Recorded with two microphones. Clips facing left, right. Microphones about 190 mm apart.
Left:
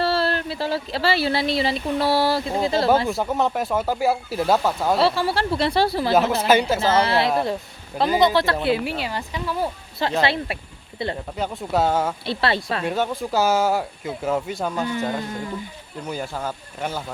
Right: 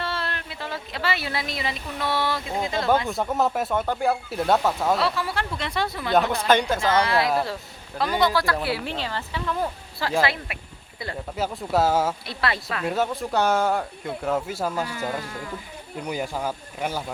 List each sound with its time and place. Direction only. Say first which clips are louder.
0.0 s speech: left 9 dB; 35° left (ahead or behind)
3.1 s speech: left 2 dB; centre (ahead or behind)
4.9 s speech: left 5 dB; 30° left (ahead or behind)
6.1 s speech: left 1 dB; 5° left (ahead or behind)
6.8 s speech: left 2 dB; 30° left (ahead or behind)
8.8 s speech: left 3 dB; 10° left (ahead or behind)
10.0 s speech: left 2 dB; 20° left (ahead or behind)
11.3 s speech: even; centre (ahead or behind)
12.2 s speech: left 5 dB; 30° left (ahead or behind)
12.8 s speech: left 1 dB; centre (ahead or behind)
16.0 s speech: even; 15° right (ahead or behind)